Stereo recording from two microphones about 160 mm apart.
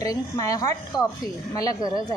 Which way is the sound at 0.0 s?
20° left (ahead or behind).